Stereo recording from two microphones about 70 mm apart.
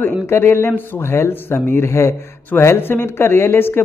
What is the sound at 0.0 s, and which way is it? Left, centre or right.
Speech, left.